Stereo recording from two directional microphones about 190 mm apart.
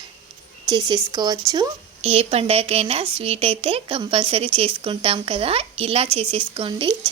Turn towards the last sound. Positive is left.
turn(degrees=-25)  # may be behind; listen again after turning